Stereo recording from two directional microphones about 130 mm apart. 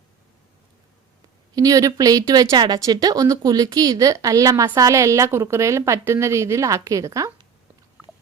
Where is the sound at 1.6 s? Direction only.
25° right (ahead or behind).